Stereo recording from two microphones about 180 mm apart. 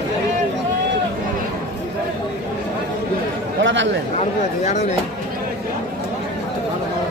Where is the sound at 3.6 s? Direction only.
90° right.